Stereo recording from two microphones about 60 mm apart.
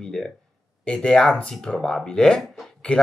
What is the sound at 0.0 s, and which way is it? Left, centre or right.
Speech, centre.